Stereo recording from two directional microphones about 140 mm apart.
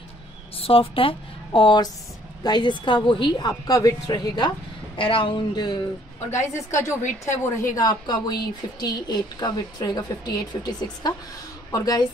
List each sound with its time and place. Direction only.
0.6 s a woman's voice: 40° left (ahead or behind)
4.9 s a woman's voice: 40° left (ahead or behind)
6.3 s a woman's voice: 20° left (ahead or behind)